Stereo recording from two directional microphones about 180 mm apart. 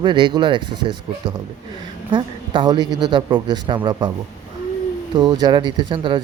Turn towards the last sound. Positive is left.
turn(degrees=-25)  # may be behind; listen again after turning